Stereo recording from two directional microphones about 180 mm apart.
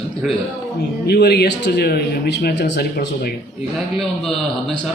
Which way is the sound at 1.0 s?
65° left (ahead or behind).